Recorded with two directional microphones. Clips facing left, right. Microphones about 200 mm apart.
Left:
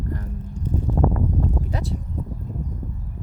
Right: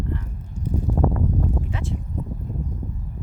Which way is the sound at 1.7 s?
40° left (ahead or behind).